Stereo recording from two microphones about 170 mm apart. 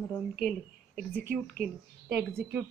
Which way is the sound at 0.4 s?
Centre (ahead or behind).